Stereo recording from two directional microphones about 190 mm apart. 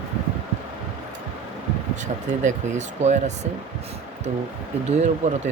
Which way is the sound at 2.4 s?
40° right (ahead or behind).